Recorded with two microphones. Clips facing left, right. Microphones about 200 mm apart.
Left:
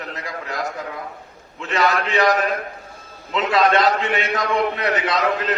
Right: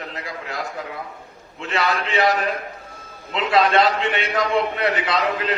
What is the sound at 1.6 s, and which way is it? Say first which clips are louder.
A man's voice: left 3 dB; 40° left (ahead or behind).